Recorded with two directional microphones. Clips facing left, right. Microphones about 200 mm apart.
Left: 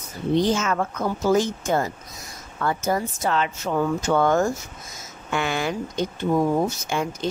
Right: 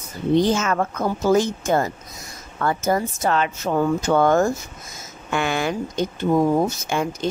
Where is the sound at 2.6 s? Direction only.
50° right (ahead or behind).